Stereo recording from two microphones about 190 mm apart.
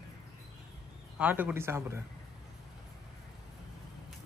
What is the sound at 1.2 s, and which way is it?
Speech, 10° right (ahead or behind).